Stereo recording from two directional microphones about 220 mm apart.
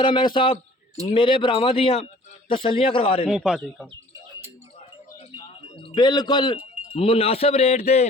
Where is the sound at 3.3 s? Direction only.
5° right (ahead or behind).